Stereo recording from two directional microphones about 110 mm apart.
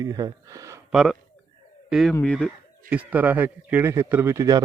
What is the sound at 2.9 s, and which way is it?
A man's voice, 15° right (ahead or behind).